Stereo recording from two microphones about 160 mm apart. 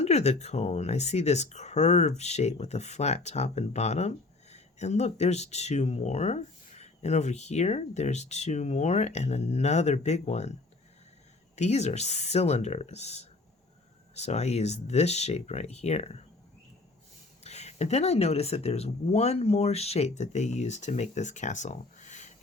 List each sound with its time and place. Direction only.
0.0 s speech: 45° left (ahead or behind)
11.5 s speech: 45° left (ahead or behind)
17.4 s speech: 45° left (ahead or behind)